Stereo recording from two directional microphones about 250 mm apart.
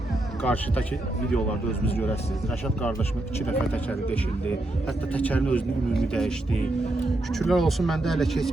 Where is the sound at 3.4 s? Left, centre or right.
Centre.